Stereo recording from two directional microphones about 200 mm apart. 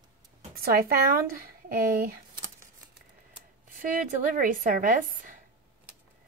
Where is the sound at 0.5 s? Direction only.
50° right (ahead or behind).